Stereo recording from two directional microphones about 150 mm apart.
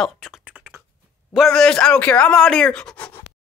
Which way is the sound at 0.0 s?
Centre (ahead or behind).